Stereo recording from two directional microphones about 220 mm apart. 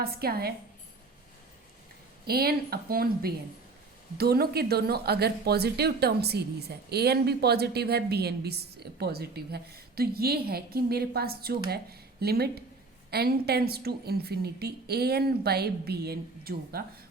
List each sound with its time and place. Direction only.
0.0 s speech: 45° right (ahead or behind)
2.2 s speech: 45° right (ahead or behind)